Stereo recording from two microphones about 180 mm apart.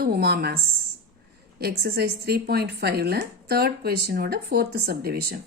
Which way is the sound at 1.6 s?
60° right (ahead or behind).